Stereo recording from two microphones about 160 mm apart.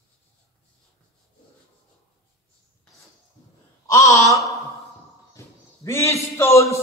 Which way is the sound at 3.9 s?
20° left (ahead or behind).